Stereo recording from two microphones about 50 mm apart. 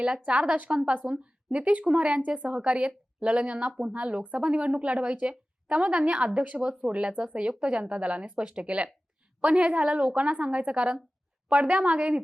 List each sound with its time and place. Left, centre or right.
0.0 s a woman's voice: right